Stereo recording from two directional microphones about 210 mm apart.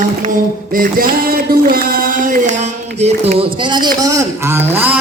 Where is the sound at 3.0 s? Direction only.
30° right (ahead or behind).